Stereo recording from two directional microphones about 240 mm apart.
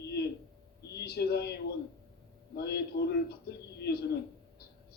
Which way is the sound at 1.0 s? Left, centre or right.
Left.